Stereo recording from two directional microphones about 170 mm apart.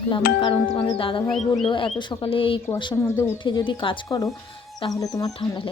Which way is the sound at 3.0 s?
15° left (ahead or behind).